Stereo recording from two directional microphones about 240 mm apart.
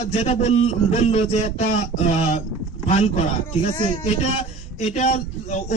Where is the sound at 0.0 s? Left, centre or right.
Left.